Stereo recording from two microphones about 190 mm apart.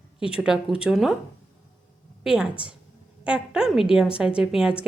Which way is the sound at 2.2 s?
5° right (ahead or behind).